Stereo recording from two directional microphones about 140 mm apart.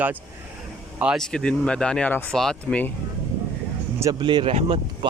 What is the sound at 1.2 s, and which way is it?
Speech, 5° left (ahead or behind).